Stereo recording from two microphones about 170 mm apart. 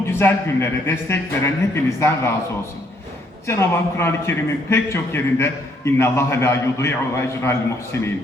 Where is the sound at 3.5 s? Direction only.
15° left (ahead or behind).